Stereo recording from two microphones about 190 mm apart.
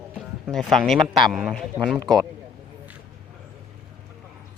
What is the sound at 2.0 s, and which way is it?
Speech, 20° right (ahead or behind).